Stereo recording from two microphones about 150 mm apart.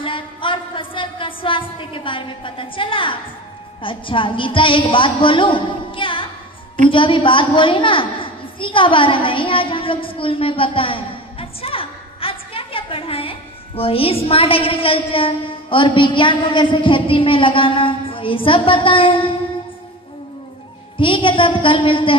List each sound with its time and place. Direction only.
0.0 s a sound: 35° left (ahead or behind)
3.8 s a woman's voice: 35° left (ahead or behind)
21.0 s a woman's voice: 35° left (ahead or behind)